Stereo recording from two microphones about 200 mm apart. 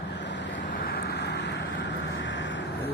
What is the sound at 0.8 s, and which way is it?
Vehicle, 55° left (ahead or behind).